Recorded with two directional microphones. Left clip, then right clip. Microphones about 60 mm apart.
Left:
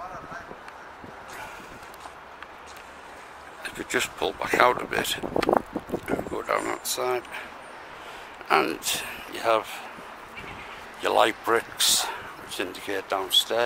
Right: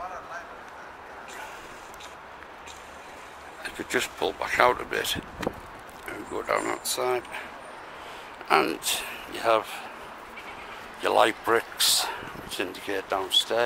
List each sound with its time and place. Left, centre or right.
3.6 s speech: centre
8.5 s speech: centre
11.0 s a man's voice: centre